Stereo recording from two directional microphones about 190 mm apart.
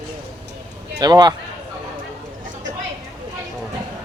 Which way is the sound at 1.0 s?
20° right (ahead or behind).